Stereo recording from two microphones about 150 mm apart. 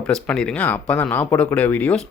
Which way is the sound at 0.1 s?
5° left (ahead or behind).